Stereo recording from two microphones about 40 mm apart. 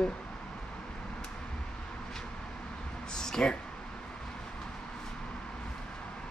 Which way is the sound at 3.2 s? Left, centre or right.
Centre.